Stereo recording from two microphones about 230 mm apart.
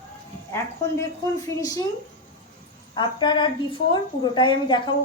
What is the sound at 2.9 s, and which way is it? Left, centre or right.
A woman's voice, centre.